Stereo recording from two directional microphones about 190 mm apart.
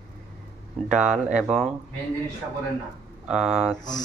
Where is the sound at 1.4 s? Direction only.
Centre (ahead or behind).